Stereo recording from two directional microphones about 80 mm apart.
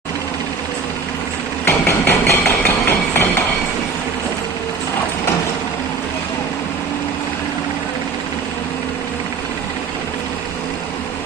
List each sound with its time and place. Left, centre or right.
1.6 s hammer: left